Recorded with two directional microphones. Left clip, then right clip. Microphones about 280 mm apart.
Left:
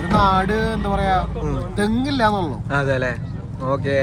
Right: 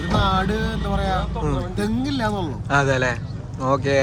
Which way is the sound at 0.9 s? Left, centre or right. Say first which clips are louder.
Left 4 dB; centre.